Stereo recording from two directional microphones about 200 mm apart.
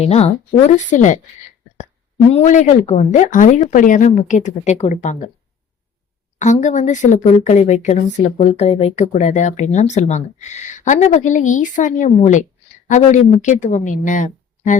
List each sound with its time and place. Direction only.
0.0 s speech: 30° left (ahead or behind)
2.3 s speech: 35° left (ahead or behind)
6.4 s speech: 35° left (ahead or behind)